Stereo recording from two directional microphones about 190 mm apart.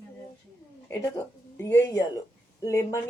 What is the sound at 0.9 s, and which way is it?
A woman's voice, 15° left (ahead or behind).